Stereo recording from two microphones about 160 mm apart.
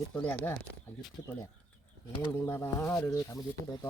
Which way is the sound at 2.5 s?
20° left (ahead or behind).